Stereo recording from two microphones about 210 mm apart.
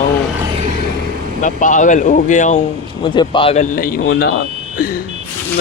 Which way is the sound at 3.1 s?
25° left (ahead or behind).